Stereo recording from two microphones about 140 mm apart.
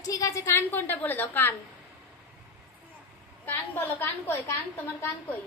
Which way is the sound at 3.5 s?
15° left (ahead or behind).